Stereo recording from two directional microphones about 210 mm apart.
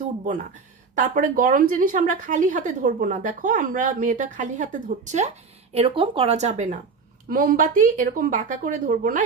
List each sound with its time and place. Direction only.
0.9 s speech: 40° right (ahead or behind)